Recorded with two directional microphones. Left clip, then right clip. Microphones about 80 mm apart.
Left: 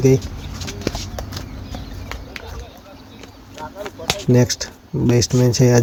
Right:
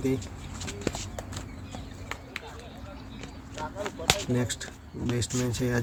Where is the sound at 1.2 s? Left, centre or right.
Left.